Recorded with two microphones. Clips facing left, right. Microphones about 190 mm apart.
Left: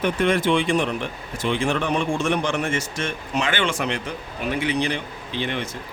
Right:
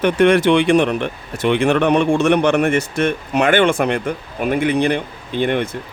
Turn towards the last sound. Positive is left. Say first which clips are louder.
# right 8 dB
turn(degrees=-55)  # may be behind; listen again after turning